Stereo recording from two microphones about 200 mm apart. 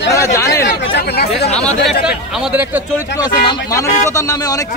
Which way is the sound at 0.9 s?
55° left (ahead or behind).